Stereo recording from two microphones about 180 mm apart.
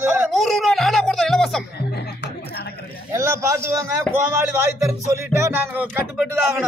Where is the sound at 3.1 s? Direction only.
15° right (ahead or behind).